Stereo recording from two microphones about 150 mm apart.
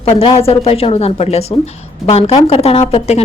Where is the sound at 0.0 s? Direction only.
35° left (ahead or behind).